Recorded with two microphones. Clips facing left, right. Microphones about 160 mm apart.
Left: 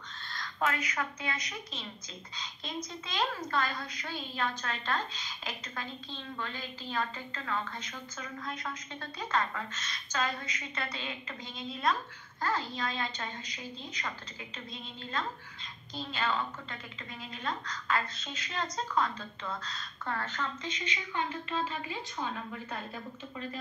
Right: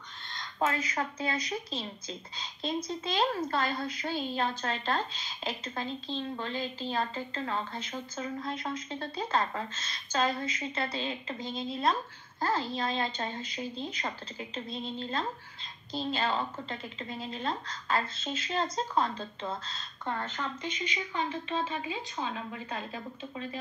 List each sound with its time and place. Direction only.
0.3 s a woman's voice: 25° right (ahead or behind)